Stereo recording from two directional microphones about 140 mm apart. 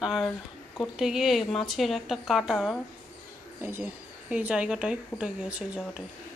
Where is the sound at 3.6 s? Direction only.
15° right (ahead or behind).